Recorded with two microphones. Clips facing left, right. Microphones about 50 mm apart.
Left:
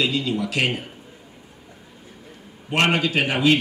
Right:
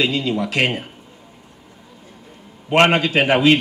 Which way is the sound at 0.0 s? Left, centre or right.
Right.